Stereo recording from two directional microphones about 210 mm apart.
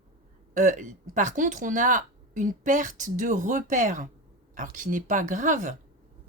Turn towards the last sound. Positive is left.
turn(degrees=-35)  # may be behind; listen again after turning